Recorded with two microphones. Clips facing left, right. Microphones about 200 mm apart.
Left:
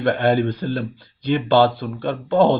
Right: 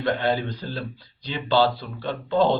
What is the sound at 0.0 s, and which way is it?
Speech, 55° left (ahead or behind).